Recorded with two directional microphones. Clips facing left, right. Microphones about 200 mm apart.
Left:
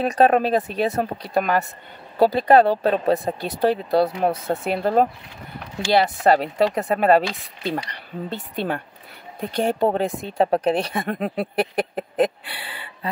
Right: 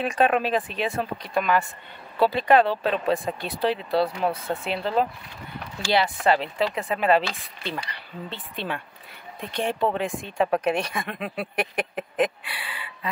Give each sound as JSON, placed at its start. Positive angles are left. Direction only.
{"t": 0.0, "sound": "speech", "side_deg": 40}